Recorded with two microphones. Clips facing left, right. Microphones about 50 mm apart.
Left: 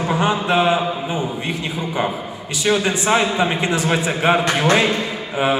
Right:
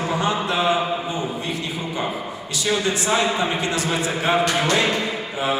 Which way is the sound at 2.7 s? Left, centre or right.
Left.